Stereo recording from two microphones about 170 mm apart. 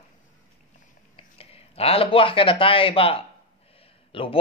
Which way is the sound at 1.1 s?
35° left (ahead or behind).